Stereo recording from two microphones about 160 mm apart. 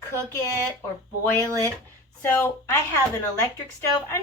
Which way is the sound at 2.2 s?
15° left (ahead or behind).